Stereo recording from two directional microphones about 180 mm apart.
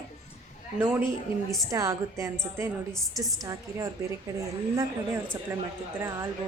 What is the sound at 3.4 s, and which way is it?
Speech, 15° right (ahead or behind).